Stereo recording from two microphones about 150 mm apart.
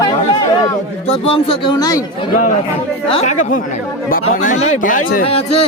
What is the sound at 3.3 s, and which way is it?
Speech, 60° left (ahead or behind).